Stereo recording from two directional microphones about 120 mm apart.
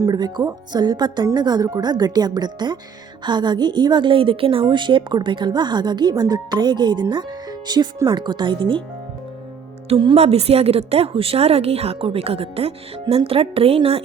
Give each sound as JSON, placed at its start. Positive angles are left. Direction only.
{"t": 0.0, "sound": "a woman's voice", "side_deg": -35}
{"t": 9.9, "sound": "speech", "side_deg": -45}
{"t": 10.2, "sound": "a woman's voice", "side_deg": -60}